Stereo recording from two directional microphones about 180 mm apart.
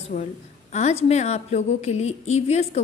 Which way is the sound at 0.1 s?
40° left (ahead or behind).